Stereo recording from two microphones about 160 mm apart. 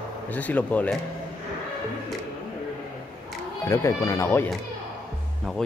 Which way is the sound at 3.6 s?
20° left (ahead or behind).